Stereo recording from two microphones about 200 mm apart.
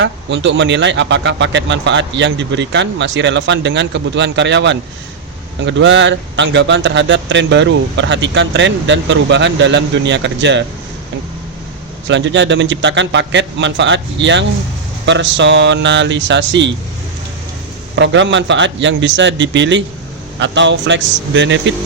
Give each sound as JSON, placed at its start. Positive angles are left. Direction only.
{"t": 0.0, "sound": "a man's voice", "side_deg": -65}
{"t": 12.0, "sound": "a man's voice", "side_deg": -65}
{"t": 17.9, "sound": "a man's voice", "side_deg": -65}